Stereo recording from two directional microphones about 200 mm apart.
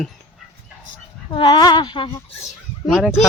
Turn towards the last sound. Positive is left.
turn(degrees=0)  # may be behind; listen again after turning